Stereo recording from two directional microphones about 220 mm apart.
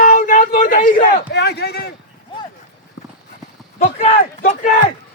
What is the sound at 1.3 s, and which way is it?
Speech, 50° left (ahead or behind).